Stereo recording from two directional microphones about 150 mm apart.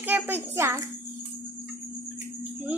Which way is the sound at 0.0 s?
15° right (ahead or behind).